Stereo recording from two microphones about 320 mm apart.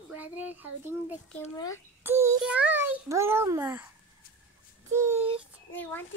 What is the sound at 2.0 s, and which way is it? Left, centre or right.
A child's voice, centre.